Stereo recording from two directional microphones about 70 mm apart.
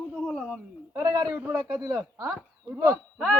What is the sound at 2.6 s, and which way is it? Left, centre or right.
Speech, right.